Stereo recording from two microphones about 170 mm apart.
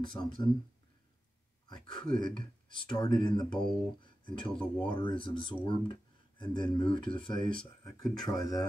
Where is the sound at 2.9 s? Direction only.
25° left (ahead or behind).